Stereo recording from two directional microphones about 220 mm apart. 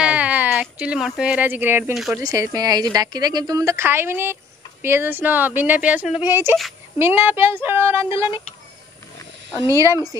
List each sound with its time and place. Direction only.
0.0 s a woman's voice: 5° right (ahead or behind)
9.7 s a woman's voice: 15° right (ahead or behind)